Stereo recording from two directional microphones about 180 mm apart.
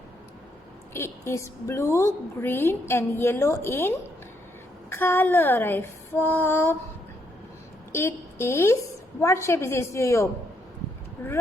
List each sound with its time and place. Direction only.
0.9 s a woman's voice: 15° left (ahead or behind)
7.9 s a woman's voice: 15° left (ahead or behind)